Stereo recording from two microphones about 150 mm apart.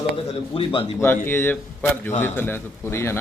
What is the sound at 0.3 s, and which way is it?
Speech, 35° left (ahead or behind).